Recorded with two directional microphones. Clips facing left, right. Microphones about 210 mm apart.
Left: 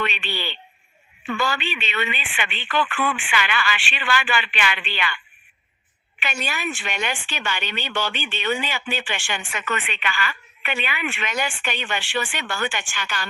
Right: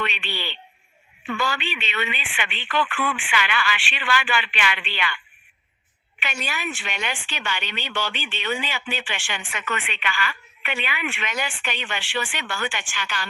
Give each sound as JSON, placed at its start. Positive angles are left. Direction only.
{"t": 0.0, "sound": "speech", "side_deg": 45}
{"t": 6.2, "sound": "speech", "side_deg": 45}